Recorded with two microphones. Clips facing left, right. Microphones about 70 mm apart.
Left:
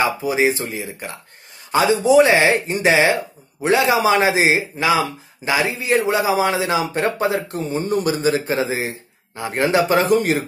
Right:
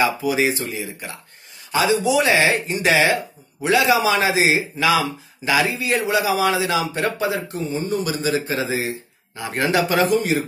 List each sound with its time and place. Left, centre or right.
0.0 s speech: left
10.0 s speech: left